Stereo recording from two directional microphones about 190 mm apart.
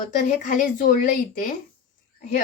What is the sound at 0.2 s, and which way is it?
Speech, 40° left (ahead or behind).